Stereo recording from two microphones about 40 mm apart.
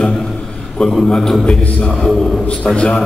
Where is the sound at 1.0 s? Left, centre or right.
Centre.